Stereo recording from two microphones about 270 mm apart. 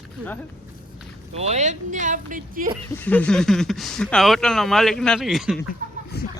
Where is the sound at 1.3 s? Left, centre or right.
Right.